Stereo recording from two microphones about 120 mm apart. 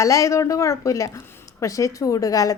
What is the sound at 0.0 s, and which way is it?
A woman's voice, 25° left (ahead or behind).